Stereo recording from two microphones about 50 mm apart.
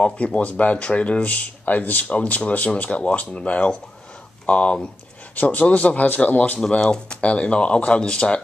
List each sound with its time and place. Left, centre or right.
0.0 s speech: left
5.3 s speech: left
6.8 s speech: centre